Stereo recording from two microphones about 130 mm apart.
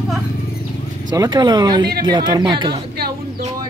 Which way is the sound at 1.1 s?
30° right (ahead or behind).